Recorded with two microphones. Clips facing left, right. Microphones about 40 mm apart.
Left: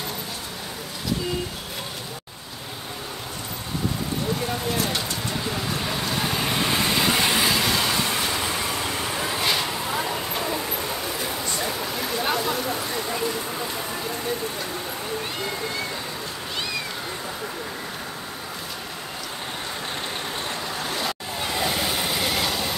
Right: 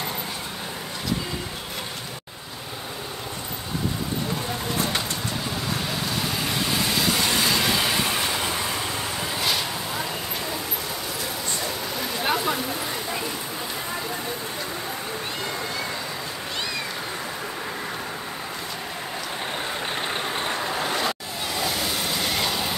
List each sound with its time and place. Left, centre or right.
6.6 s vehicle: left
7.5 s vehicle: centre
12.0 s a sound: centre
20.3 s vehicle: right
21.6 s vehicle: centre